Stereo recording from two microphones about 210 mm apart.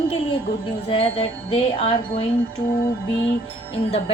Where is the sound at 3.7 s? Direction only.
25° left (ahead or behind).